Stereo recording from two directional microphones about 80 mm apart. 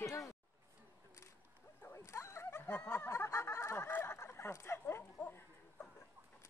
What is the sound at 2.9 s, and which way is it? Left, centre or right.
Snicker, left.